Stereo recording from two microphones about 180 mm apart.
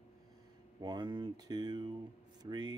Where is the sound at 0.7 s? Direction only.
25° right (ahead or behind).